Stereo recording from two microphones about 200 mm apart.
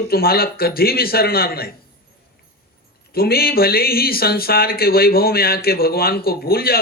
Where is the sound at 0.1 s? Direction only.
50° left (ahead or behind).